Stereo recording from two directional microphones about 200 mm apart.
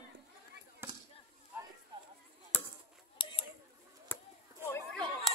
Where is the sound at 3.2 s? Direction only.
25° left (ahead or behind).